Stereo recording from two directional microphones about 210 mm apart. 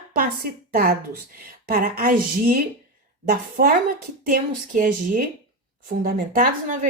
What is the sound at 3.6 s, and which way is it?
Speech, 45° right (ahead or behind).